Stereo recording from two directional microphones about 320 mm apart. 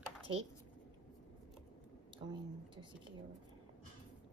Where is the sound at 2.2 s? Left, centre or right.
Centre.